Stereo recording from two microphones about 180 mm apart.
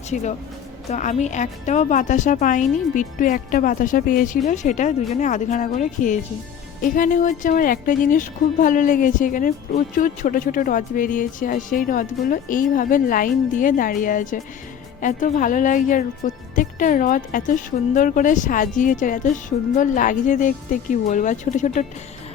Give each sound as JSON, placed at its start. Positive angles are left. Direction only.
{"t": 0.1, "sound": "a woman's voice", "side_deg": 45}